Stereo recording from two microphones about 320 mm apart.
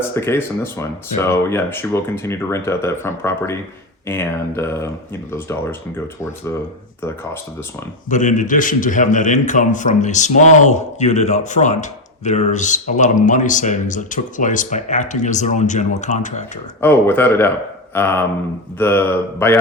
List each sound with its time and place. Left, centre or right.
0.1 s speech: centre
8.1 s a man's voice: left
16.8 s speech: centre